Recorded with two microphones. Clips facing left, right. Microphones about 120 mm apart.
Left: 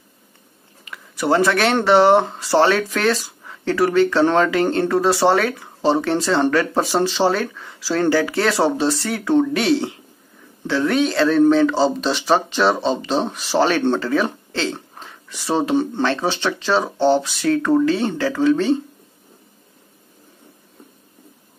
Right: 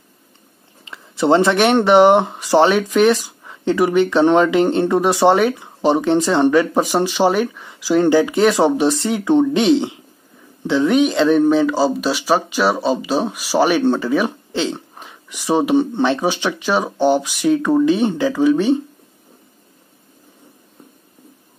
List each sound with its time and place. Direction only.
0.8 s speech: 25° right (ahead or behind)